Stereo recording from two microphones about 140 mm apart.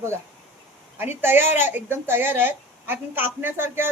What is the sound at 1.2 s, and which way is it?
A woman's voice, 15° right (ahead or behind).